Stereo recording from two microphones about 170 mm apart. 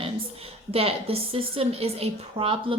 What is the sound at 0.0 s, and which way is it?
A woman's voice, 35° right (ahead or behind).